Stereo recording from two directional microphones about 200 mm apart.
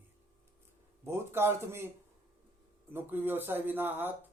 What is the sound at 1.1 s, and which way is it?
Speech, 10° right (ahead or behind).